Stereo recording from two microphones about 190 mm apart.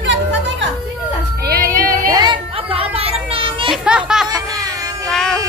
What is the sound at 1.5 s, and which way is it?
Music, 50° right (ahead or behind).